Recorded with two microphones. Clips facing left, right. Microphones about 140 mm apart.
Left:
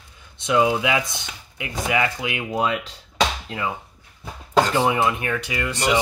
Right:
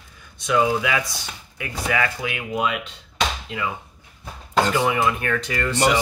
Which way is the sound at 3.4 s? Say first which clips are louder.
Even; 30° left (ahead or behind).